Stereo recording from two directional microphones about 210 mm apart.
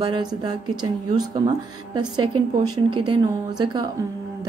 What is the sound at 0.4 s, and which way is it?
A woman's voice, 20° right (ahead or behind).